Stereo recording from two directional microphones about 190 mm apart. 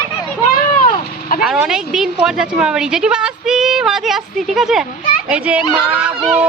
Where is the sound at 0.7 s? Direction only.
45° left (ahead or behind).